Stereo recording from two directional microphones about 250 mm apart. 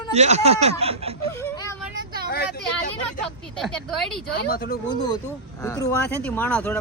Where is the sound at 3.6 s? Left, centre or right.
Centre.